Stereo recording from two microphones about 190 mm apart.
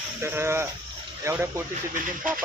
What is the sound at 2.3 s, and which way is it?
Speech, 45° right (ahead or behind).